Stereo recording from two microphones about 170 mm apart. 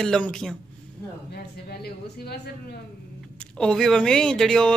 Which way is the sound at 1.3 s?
70° left (ahead or behind).